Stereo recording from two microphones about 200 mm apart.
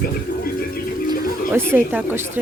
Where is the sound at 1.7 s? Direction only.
10° right (ahead or behind).